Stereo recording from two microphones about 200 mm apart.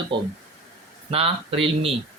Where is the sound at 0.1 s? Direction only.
25° right (ahead or behind).